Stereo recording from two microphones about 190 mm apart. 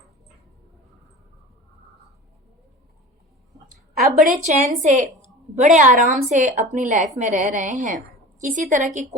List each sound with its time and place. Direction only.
4.3 s a woman's voice: 40° right (ahead or behind)